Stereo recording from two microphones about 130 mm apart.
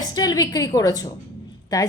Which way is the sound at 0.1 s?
30° left (ahead or behind).